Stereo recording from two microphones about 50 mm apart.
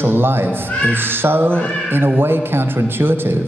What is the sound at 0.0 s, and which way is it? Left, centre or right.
Speech, right.